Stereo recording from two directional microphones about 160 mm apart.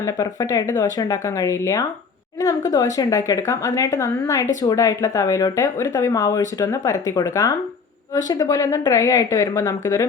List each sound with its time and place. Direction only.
0.0 s speech: 20° left (ahead or behind)